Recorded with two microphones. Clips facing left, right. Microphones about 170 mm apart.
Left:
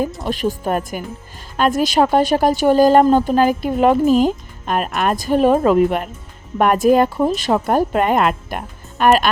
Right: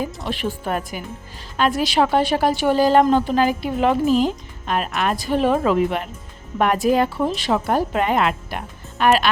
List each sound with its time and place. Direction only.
0.2 s a woman's voice: 40° left (ahead or behind)